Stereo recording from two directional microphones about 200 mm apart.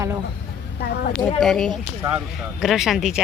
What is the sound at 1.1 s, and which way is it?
Speech, centre (ahead or behind).